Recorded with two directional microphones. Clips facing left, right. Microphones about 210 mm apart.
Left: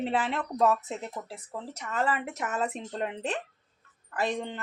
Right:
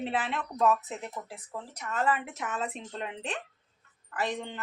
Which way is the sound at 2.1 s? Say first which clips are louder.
Left 2 dB; 40° left (ahead or behind).